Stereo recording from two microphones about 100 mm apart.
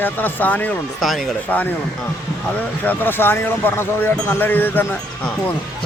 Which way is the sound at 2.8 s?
20° left (ahead or behind).